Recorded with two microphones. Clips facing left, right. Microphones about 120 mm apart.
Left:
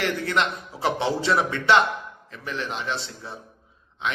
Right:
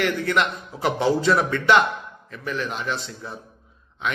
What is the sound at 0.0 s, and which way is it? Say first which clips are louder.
A man's voice: right 2 dB; 30° left (ahead or behind).